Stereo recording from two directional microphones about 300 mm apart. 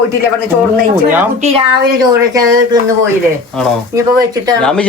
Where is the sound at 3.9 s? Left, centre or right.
Centre.